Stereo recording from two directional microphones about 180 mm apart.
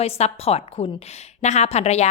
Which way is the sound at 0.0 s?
35° left (ahead or behind).